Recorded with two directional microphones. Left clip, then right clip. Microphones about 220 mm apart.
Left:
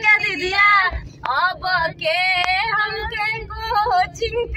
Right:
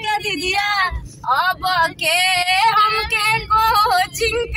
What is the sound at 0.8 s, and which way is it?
Female singing, 15° right (ahead or behind).